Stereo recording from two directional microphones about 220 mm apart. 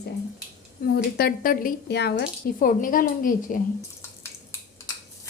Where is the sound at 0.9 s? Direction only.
45° left (ahead or behind).